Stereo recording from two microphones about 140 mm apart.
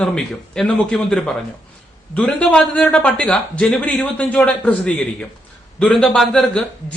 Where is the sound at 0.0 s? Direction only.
5° left (ahead or behind).